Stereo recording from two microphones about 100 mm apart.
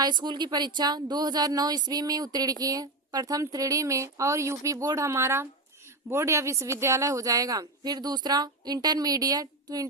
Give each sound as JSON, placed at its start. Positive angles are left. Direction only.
{"t": 0.0, "sound": "a woman's voice", "side_deg": -50}